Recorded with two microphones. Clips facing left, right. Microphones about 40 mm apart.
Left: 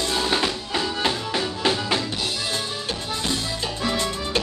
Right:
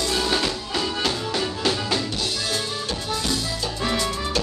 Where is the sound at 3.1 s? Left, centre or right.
Left.